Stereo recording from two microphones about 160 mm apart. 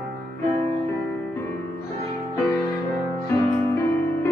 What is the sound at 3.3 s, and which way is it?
Music, 15° left (ahead or behind).